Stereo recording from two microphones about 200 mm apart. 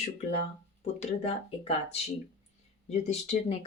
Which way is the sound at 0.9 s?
30° left (ahead or behind).